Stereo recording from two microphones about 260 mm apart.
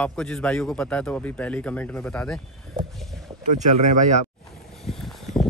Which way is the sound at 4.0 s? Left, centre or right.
Right.